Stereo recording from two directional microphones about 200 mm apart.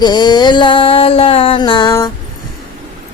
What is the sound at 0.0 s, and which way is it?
Music, 20° left (ahead or behind).